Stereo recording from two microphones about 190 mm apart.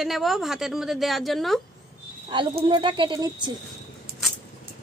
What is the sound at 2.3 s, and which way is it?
Speech, 25° right (ahead or behind).